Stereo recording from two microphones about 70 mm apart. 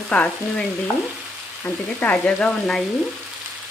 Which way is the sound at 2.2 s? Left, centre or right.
Centre.